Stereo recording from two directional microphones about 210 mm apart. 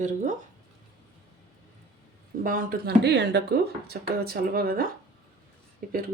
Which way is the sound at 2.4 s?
40° right (ahead or behind).